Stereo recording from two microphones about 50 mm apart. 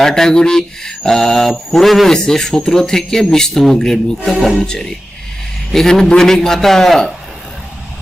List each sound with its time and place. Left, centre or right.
0.0 s mantra: centre
4.6 s mantra: centre